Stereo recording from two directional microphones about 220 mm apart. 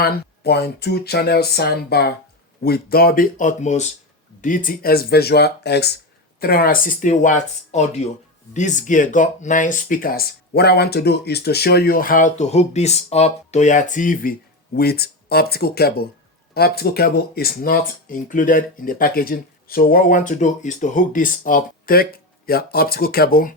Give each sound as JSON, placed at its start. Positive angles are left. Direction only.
{"t": 0.0, "sound": "speech", "side_deg": 45}